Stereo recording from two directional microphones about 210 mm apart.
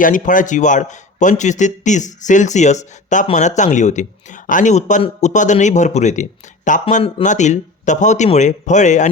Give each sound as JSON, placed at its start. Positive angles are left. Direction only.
{"t": 0.0, "sound": "a man's voice", "side_deg": 40}